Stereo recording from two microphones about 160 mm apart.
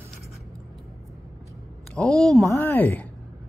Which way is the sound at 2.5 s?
15° left (ahead or behind).